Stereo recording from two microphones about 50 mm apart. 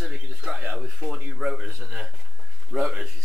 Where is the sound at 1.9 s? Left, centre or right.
Centre.